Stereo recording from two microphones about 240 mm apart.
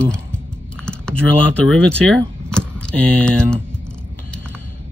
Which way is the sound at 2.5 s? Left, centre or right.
Centre.